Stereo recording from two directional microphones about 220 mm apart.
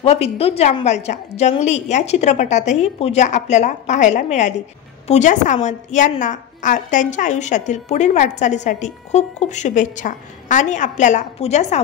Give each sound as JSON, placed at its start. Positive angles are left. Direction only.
{"t": 0.0, "sound": "a woman's voice", "side_deg": 25}